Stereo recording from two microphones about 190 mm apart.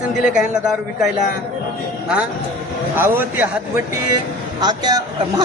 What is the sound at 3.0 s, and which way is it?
A man's voice, 10° right (ahead or behind).